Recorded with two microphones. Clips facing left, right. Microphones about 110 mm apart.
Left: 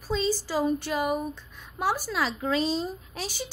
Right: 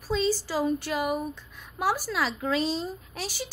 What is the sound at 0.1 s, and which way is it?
A woman's voice, centre (ahead or behind).